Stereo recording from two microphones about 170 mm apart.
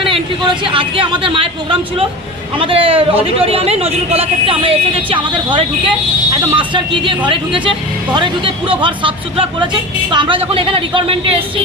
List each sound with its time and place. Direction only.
0.6 s speech: 30° right (ahead or behind)